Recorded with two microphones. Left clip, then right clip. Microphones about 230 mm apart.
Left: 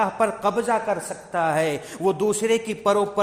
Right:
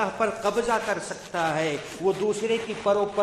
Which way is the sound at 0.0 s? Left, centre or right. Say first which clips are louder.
Left 4 dB; left.